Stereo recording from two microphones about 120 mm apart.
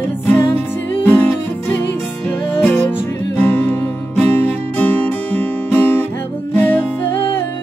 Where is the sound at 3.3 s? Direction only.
10° left (ahead or behind).